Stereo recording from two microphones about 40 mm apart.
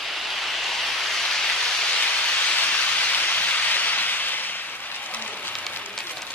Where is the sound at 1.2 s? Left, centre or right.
Centre.